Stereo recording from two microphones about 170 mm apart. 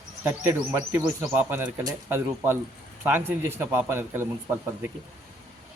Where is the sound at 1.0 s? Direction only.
10° right (ahead or behind).